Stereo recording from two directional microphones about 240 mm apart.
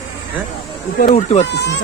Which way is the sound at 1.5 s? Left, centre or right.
Left.